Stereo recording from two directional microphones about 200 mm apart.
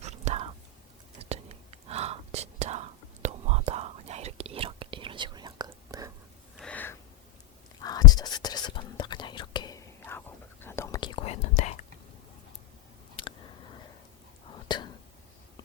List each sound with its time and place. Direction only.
0.0 s whispering: 35° right (ahead or behind)
6.6 s gasp: 5° left (ahead or behind)
7.8 s whispering: 20° left (ahead or behind); by 11.7 s 35° left (ahead or behind)
13.2 s a sound: 25° left (ahead or behind)
14.5 s whispering: 20° left (ahead or behind)